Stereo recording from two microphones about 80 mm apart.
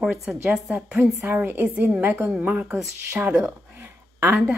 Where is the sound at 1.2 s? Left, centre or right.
Right.